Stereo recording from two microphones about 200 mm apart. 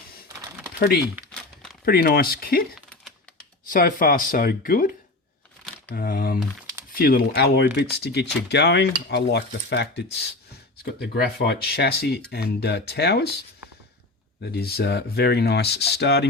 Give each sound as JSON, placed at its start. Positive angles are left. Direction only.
{"t": 1.8, "sound": "speech", "side_deg": 50}
{"t": 3.7, "sound": "speech", "side_deg": 45}
{"t": 5.9, "sound": "speech", "side_deg": 45}
{"t": 14.5, "sound": "speech", "side_deg": 55}